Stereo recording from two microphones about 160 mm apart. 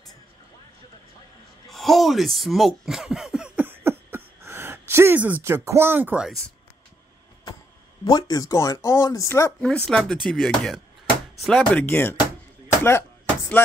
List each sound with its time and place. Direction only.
1.7 s speech: centre (ahead or behind)
8.0 s speech: 25° left (ahead or behind)
9.6 s music: 5° left (ahead or behind)
11.8 s speech: 10° left (ahead or behind)
12.6 s chop: 15° left (ahead or behind)